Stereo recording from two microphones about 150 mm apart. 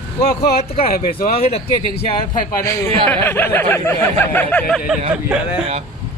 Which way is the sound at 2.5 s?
20° left (ahead or behind).